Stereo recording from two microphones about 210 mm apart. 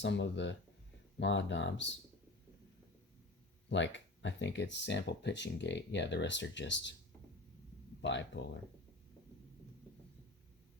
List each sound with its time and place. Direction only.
0.0 s speech: 55° left (ahead or behind)
3.7 s speech: 60° left (ahead or behind)
8.0 s speech: 55° left (ahead or behind)